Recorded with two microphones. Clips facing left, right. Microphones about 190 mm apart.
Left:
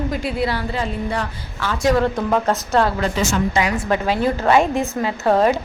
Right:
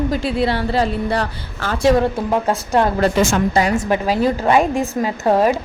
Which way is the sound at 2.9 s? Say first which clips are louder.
Right 5 dB; 45° right (ahead or behind).